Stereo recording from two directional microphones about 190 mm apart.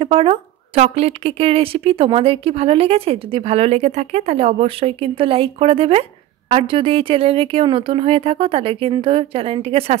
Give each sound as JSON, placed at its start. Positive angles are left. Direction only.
{"t": 0.0, "sound": "a woman's voice", "side_deg": -30}